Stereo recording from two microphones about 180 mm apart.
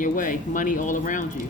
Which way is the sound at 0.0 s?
45° left (ahead or behind).